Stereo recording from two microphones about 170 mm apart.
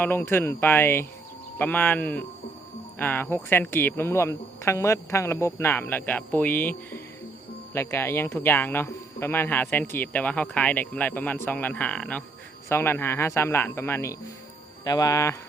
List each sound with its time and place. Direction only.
0.0 s speech: 10° left (ahead or behind)